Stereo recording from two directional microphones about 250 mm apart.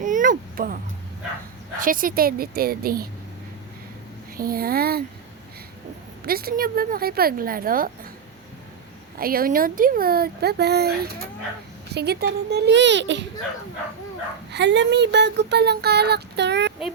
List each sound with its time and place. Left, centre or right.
0.0 s a sound: right
1.8 s speech: right
4.4 s speech: right
6.2 s speech: right
9.1 s speech: right
14.5 s speech: right